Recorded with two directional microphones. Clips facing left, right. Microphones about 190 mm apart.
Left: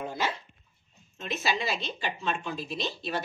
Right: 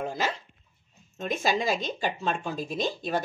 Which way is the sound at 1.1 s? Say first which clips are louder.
Right 4 dB; 45° right (ahead or behind).